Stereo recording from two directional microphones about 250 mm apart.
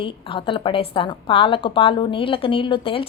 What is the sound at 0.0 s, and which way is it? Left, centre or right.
A woman's voice, left.